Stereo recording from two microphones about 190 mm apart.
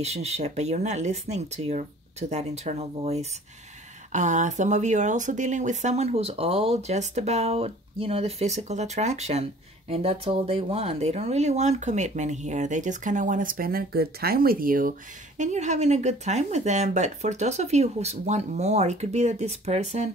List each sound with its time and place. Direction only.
0.0 s speech: 35° right (ahead or behind)